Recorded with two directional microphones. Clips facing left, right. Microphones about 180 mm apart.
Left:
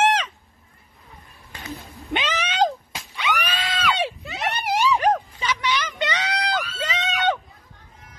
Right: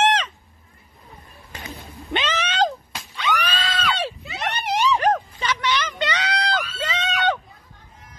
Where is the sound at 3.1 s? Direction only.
15° left (ahead or behind).